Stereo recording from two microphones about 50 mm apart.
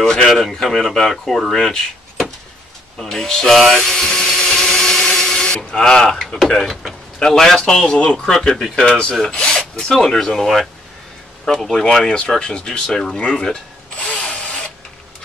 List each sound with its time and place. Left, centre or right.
0.0 s speech: centre
3.0 s tools: centre
6.2 s speech: centre
14.1 s drill: centre